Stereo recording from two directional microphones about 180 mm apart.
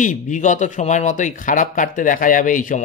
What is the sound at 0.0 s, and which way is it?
Speech, 45° left (ahead or behind).